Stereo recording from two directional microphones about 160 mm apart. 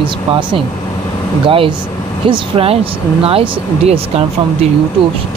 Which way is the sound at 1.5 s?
35° right (ahead or behind).